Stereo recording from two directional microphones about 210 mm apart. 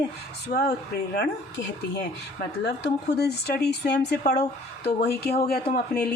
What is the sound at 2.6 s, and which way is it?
Speech, 50° left (ahead or behind).